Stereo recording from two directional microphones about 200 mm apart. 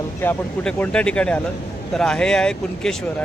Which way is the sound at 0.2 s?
5° left (ahead or behind).